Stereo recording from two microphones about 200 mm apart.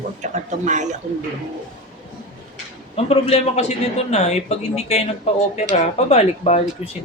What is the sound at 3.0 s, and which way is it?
A man's voice, 30° left (ahead or behind).